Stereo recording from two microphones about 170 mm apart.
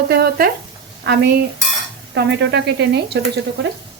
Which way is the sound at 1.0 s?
80° right.